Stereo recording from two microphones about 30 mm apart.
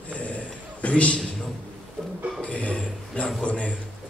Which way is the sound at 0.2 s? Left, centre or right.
Left.